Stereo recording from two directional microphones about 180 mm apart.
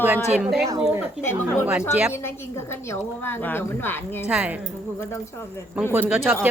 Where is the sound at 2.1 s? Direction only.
15° left (ahead or behind).